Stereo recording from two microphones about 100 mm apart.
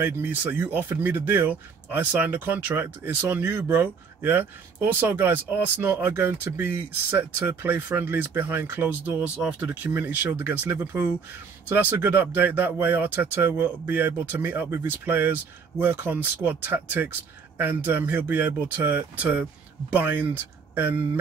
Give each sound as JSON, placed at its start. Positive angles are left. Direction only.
{"t": 0.0, "sound": "speech", "side_deg": -20}